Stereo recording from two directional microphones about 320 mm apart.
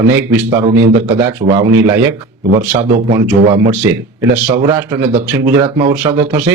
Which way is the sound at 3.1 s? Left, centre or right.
Centre.